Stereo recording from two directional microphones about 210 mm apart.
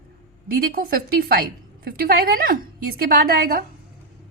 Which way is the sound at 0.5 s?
45° right (ahead or behind).